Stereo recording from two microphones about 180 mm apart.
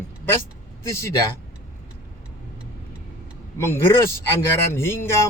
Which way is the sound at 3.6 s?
15° left (ahead or behind).